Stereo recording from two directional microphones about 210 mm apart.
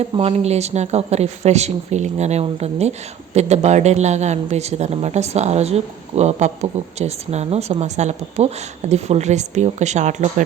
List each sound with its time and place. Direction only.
0.0 s speech: 30° right (ahead or behind)